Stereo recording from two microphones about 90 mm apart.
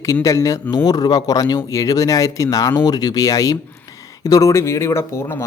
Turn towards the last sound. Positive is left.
turn(degrees=25)  # may be behind; listen again after turning